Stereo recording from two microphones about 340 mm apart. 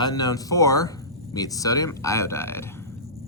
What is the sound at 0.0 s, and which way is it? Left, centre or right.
Speech, centre.